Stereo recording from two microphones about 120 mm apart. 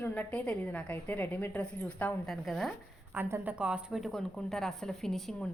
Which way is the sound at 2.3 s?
Centre (ahead or behind).